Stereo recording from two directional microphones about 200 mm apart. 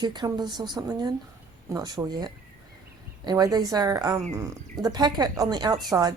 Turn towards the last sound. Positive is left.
turn(degrees=-20)  # may be behind; listen again after turning